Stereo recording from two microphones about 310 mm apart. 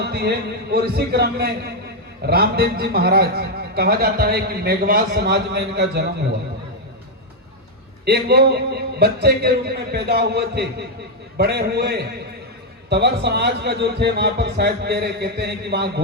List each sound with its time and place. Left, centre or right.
0.0 s a man's voice: right
8.0 s a man's voice: right